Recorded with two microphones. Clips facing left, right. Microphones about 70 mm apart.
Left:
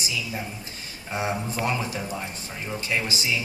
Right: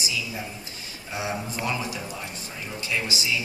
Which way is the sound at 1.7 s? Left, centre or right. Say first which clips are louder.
Left 1 dB; left.